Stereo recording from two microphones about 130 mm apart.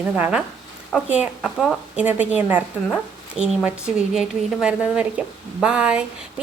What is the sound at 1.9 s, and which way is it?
A woman's voice, 10° right (ahead or behind).